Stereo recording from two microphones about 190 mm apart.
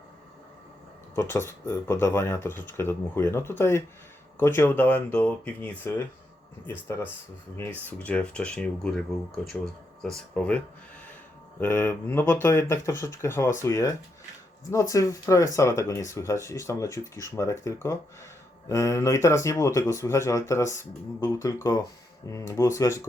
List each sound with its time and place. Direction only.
1.1 s speech: 15° left (ahead or behind)
11.6 s speech: 10° left (ahead or behind)